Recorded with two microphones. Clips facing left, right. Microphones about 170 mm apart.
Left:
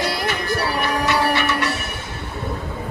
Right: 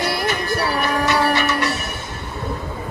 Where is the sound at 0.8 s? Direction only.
40° right (ahead or behind).